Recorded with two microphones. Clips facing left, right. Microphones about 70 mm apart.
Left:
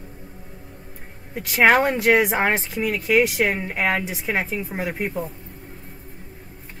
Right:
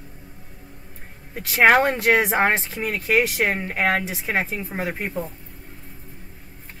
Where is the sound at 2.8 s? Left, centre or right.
Right.